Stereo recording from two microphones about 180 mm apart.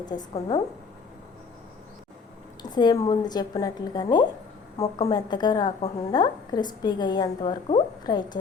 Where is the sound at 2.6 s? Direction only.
25° left (ahead or behind).